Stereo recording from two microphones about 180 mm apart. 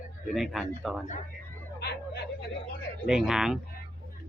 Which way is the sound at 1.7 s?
65° left (ahead or behind).